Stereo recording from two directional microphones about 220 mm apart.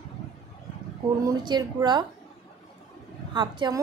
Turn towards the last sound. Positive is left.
turn(degrees=-20)  # may be behind; listen again after turning